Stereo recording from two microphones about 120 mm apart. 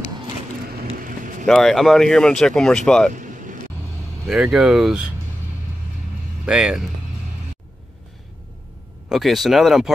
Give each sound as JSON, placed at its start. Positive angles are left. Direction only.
{"t": 1.4, "sound": "speech", "side_deg": 5}
{"t": 3.2, "sound": "vehicle", "side_deg": -90}
{"t": 4.3, "sound": "speech", "side_deg": -5}
{"t": 6.4, "sound": "speech", "side_deg": -5}
{"t": 9.1, "sound": "speech", "side_deg": 0}